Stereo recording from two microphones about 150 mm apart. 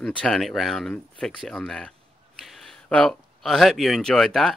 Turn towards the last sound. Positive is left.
turn(degrees=0)  # may be behind; listen again after turning